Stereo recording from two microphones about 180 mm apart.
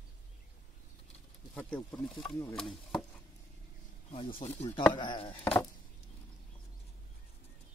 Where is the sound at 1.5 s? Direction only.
5° left (ahead or behind).